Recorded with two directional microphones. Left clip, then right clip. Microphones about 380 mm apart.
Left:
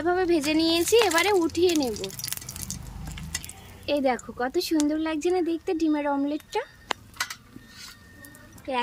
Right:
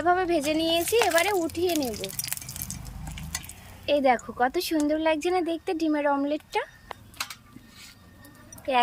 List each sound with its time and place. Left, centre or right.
0.0 s speech: centre
3.8 s speech: centre
8.7 s speech: centre